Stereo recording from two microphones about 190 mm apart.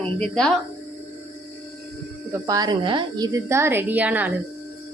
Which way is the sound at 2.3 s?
20° right (ahead or behind).